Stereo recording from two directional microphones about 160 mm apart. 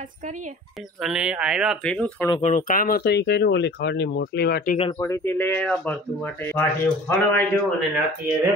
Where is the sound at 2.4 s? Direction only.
55° left (ahead or behind); by 4.7 s 80° left.